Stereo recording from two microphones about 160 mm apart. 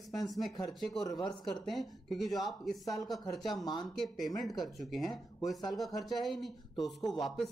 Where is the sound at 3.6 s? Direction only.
25° left (ahead or behind).